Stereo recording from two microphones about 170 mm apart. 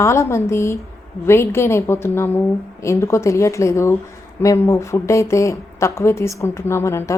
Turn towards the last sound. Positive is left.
turn(degrees=15)  # may be behind; listen again after turning